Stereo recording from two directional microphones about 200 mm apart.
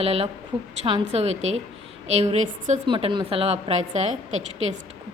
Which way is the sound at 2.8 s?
25° right (ahead or behind).